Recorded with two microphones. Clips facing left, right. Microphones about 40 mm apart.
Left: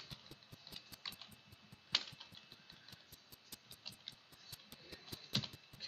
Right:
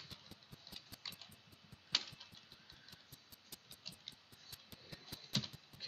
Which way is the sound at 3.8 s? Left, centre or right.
Centre.